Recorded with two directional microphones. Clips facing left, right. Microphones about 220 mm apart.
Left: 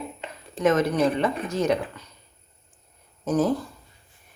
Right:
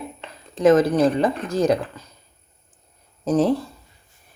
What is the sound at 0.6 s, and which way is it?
Speech, 30° right (ahead or behind).